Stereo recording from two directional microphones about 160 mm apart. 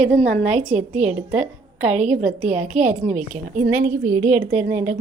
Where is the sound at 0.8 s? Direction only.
45° right (ahead or behind).